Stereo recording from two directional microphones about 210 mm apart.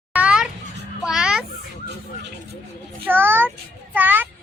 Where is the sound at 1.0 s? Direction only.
5° right (ahead or behind).